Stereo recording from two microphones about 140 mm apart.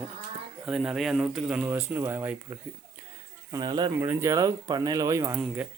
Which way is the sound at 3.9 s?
20° right (ahead or behind).